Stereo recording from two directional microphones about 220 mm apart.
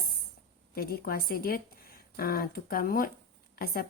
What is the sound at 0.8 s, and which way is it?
A woman's voice, 45° left (ahead or behind).